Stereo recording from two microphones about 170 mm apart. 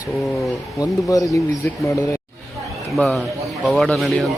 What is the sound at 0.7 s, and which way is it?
Speech, 20° left (ahead or behind).